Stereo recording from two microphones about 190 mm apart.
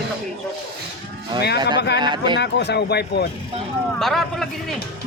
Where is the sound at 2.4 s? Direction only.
60° left (ahead or behind).